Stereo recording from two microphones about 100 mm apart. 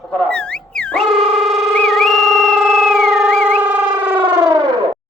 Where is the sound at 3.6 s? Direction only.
15° right (ahead or behind).